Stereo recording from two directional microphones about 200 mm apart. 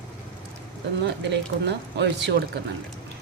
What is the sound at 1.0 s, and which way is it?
Speech, 60° right (ahead or behind).